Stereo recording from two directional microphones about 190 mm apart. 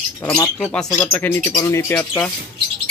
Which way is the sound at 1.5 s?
20° left (ahead or behind).